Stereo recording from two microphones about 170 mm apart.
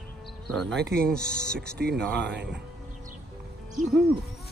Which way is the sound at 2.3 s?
90° right.